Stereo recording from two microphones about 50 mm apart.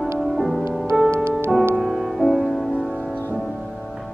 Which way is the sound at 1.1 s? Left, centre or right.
Right.